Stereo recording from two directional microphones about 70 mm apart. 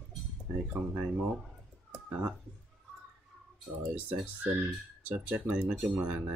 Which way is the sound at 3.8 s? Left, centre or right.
Right.